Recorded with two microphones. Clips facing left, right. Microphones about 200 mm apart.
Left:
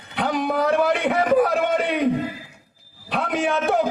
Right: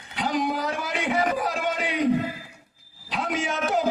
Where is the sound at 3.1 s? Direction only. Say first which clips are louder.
Left 5 dB; 60° left (ahead or behind).